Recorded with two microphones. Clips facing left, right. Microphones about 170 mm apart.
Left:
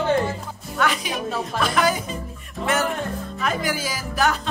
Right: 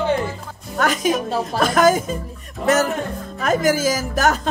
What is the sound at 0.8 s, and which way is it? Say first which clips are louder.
Music: right 5 dB; 45° right (ahead or behind).